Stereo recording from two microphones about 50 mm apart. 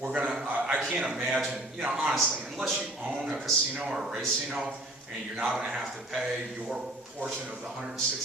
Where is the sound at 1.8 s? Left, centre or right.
Centre.